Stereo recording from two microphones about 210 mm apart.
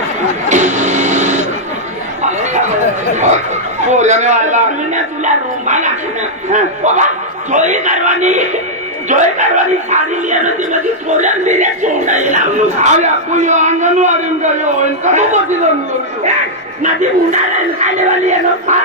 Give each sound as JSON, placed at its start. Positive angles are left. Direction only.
{"t": 0.4, "sound": "a sound", "side_deg": -35}
{"t": 2.2, "sound": "chatter", "side_deg": -35}
{"t": 3.8, "sound": "speech", "side_deg": -35}
{"t": 16.8, "sound": "speech", "side_deg": -35}